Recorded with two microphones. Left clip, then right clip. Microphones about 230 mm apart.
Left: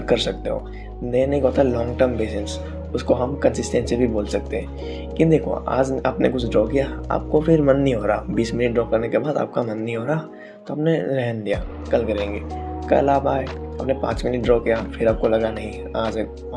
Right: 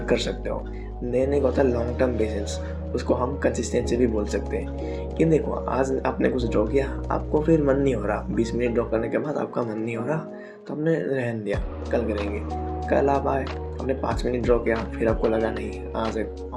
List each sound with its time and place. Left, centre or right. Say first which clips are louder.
0.1 s speech: left 5 dB; left
14.2 s speech: left 3 dB; left
15.0 s speech: left 4 dB; centre
16.0 s speech: left 4 dB; left